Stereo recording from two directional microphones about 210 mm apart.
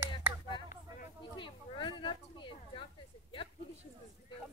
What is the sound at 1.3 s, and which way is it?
Speech, 25° left (ahead or behind).